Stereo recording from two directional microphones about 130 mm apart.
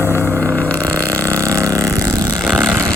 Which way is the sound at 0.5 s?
10° left (ahead or behind).